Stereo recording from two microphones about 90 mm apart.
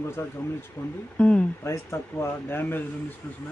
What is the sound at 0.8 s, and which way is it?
Speech, 45° left (ahead or behind).